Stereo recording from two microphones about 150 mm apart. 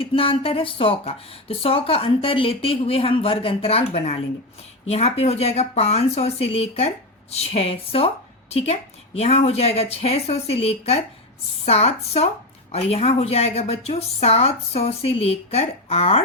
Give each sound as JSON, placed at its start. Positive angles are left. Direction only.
{"t": 0.0, "sound": "speech", "side_deg": 35}